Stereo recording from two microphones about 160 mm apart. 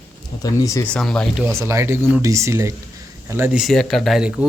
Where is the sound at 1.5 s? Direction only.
15° right (ahead or behind).